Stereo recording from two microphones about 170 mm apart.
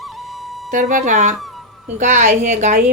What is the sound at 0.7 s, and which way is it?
A woman's voice, 50° right (ahead or behind).